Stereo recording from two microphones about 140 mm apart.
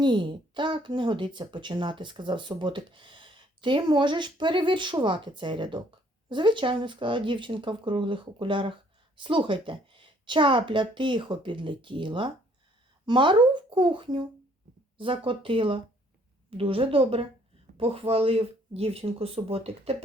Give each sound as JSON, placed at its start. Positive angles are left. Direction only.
{"t": 0.0, "sound": "speech", "side_deg": -35}